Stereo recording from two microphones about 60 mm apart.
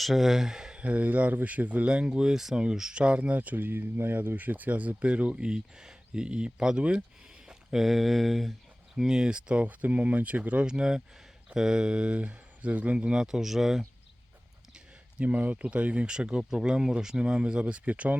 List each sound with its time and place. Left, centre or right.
0.0 s speech: centre
7.4 s speech: centre
9.0 s speech: centre
10.7 s speech: centre
15.2 s speech: right